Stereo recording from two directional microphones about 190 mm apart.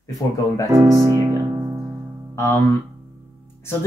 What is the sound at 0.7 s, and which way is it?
Music, 15° right (ahead or behind).